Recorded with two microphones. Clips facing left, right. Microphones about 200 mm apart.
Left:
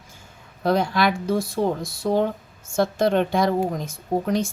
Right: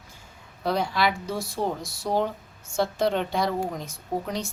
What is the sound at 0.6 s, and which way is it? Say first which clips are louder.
Speech: left 4 dB; 50° left (ahead or behind).